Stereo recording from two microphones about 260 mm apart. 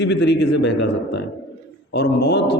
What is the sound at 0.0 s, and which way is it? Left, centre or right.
A man's voice, left.